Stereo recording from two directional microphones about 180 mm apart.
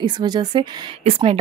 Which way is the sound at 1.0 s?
35° right (ahead or behind).